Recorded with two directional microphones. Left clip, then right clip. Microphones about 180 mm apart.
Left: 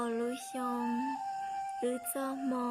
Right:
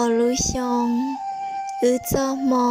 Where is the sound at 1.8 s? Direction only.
55° right (ahead or behind).